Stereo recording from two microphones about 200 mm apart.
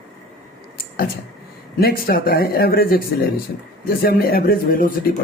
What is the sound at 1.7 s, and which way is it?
Speech, 50° left (ahead or behind).